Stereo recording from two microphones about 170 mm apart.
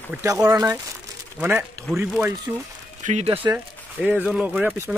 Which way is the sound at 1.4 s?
10° right (ahead or behind).